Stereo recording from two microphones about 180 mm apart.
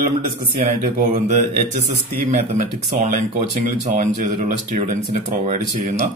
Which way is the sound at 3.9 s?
40° right (ahead or behind).